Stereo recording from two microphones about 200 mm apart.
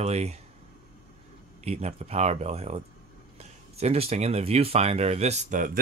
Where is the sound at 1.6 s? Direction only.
30° right (ahead or behind).